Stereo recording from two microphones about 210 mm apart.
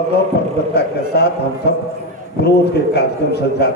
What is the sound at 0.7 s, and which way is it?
A man's voice, 50° left (ahead or behind).